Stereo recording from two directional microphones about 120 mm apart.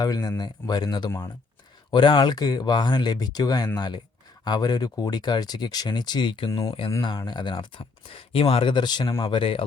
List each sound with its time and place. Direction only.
0.0 s speech: 30° left (ahead or behind)
6.5 s speech: 30° left (ahead or behind); by 9.6 s 45° left (ahead or behind)